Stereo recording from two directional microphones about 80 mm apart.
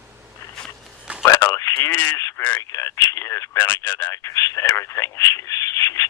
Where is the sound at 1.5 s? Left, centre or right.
Left.